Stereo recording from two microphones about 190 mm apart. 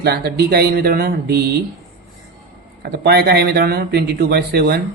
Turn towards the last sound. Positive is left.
turn(degrees=-55)  # may be behind; listen again after turning